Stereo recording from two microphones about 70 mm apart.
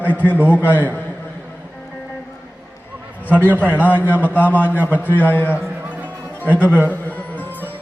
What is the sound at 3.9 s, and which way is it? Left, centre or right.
Speech, left.